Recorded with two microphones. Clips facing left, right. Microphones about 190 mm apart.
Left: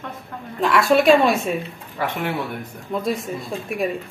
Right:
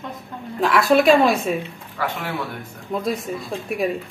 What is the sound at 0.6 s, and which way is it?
Speech, centre (ahead or behind).